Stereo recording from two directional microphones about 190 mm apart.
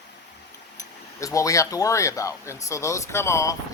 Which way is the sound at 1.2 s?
15° left (ahead or behind).